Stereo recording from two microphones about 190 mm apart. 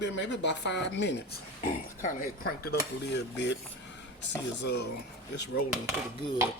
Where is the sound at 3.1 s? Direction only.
65° left (ahead or behind).